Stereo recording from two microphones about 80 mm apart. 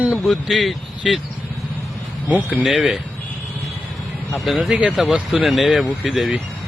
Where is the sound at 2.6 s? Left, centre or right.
Centre.